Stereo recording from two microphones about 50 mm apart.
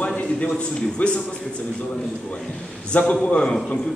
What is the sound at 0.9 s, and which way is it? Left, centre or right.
Speech, left.